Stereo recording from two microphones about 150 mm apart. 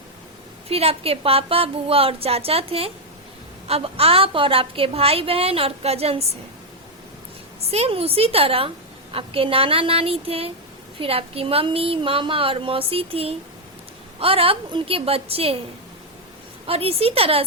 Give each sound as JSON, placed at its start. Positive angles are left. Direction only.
{"t": 0.7, "sound": "a woman's voice", "side_deg": -40}
{"t": 7.7, "sound": "a woman's voice", "side_deg": -40}
{"t": 16.6, "sound": "a woman's voice", "side_deg": -40}